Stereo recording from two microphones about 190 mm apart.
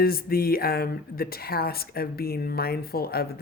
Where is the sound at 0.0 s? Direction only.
50° left (ahead or behind).